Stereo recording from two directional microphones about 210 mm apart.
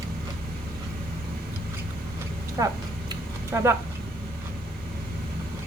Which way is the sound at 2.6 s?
15° right (ahead or behind).